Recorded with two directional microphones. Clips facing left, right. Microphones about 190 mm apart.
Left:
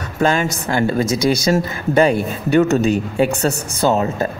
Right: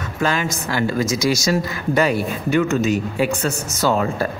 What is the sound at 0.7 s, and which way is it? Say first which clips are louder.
Speech: left 3 dB; 25° left (ahead or behind).